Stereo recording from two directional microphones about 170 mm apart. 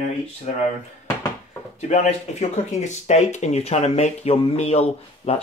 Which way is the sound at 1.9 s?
45° left (ahead or behind).